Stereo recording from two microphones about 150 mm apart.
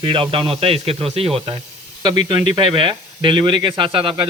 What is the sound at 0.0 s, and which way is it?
Speech, 35° right (ahead or behind).